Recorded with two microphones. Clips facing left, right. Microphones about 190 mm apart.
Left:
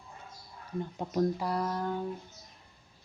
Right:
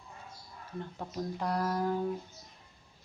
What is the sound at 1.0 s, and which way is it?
Speech, 20° left (ahead or behind).